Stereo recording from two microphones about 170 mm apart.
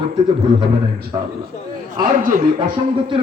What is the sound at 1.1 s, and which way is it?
Speech, 25° right (ahead or behind).